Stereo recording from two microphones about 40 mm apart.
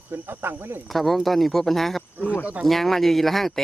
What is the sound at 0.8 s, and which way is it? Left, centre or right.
Speech, centre.